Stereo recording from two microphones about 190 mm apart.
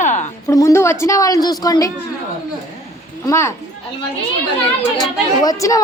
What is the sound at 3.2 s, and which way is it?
Speech, 15° left (ahead or behind).